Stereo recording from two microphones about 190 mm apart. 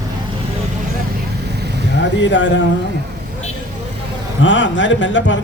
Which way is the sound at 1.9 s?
70° left (ahead or behind).